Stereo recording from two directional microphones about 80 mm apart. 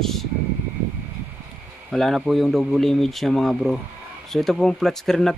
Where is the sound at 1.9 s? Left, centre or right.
Centre.